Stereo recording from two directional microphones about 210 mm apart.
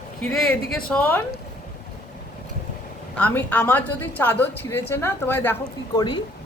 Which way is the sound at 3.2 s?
5° left (ahead or behind).